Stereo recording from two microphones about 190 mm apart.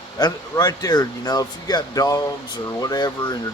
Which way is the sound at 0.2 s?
20° left (ahead or behind).